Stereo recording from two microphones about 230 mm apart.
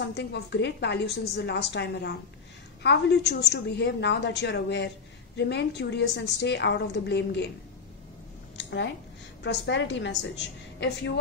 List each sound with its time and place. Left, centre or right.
0.0 s a woman's voice: left
8.5 s a woman's voice: left